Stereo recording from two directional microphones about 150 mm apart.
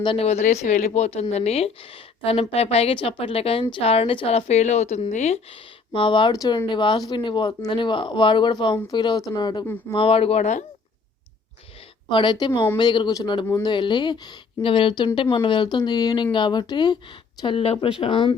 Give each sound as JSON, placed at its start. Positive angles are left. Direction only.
{"t": 0.0, "sound": "a woman's voice", "side_deg": 40}
{"t": 12.0, "sound": "a woman's voice", "side_deg": 30}